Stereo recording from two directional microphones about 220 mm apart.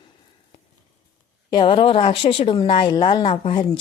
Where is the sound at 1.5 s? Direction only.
20° left (ahead or behind).